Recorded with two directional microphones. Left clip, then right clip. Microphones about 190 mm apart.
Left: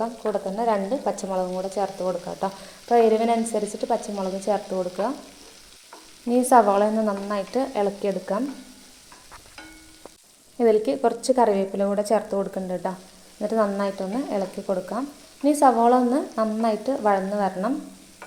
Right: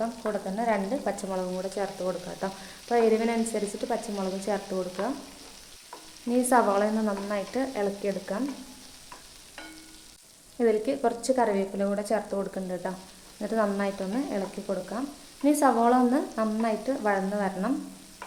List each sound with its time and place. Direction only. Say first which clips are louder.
0.0 s frying: left 4 dB; 10° left (ahead or behind)
2.9 s frying: left 5 dB; 15° left (ahead or behind)
3.8 s stir: left 5 dB; 5° left (ahead or behind)
6.3 s frying: left 6 dB; 15° left (ahead or behind)
10.6 s frying: left 5 dB; 15° left (ahead or behind)